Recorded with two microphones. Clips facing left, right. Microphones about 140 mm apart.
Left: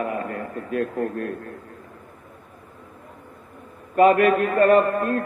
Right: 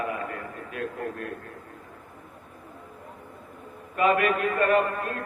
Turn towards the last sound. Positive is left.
turn(degrees=45)  # may be behind; listen again after turning